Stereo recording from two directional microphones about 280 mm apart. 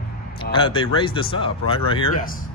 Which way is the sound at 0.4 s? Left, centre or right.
Centre.